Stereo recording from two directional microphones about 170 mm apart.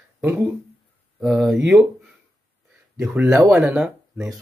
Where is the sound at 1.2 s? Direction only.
5° right (ahead or behind).